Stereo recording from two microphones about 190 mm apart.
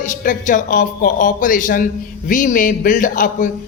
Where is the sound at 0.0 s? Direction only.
45° left (ahead or behind).